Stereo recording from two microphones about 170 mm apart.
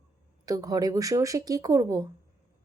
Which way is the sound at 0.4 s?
20° right (ahead or behind).